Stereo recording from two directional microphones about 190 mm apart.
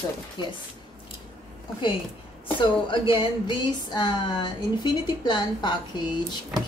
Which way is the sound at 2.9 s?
25° left (ahead or behind).